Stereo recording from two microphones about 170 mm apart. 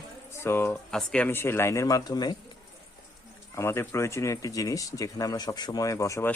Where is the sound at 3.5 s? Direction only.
15° left (ahead or behind).